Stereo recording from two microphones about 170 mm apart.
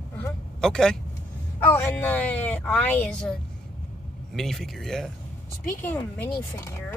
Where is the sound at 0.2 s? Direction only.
5° left (ahead or behind).